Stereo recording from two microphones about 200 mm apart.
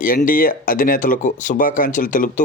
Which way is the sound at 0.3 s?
45° left (ahead or behind).